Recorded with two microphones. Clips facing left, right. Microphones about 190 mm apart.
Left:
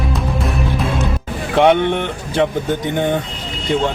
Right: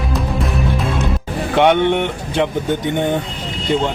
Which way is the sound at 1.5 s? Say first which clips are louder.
Even; centre (ahead or behind).